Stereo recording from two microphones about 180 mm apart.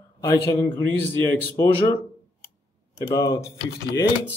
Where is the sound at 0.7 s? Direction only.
10° left (ahead or behind).